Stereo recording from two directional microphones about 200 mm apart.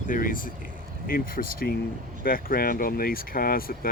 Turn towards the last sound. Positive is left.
turn(degrees=45)  # may be behind; listen again after turning